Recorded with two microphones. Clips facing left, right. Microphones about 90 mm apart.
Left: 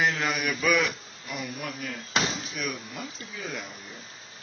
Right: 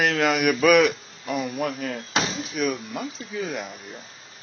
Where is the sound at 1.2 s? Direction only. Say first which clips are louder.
Right 9 dB; 50° right (ahead or behind).